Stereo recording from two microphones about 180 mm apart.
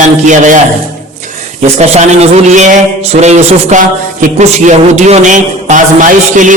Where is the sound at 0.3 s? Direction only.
45° right (ahead or behind).